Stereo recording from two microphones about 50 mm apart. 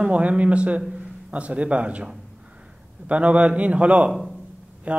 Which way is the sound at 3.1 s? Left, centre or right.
Right.